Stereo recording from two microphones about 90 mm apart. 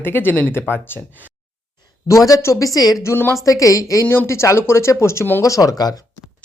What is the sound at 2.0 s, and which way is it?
Speech, 40° left (ahead or behind).